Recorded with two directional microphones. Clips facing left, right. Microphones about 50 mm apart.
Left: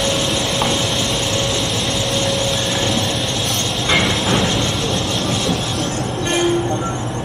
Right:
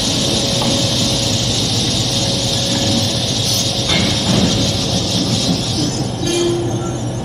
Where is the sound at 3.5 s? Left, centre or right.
Left.